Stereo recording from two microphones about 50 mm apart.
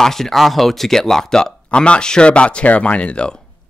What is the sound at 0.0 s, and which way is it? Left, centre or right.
Speech, centre.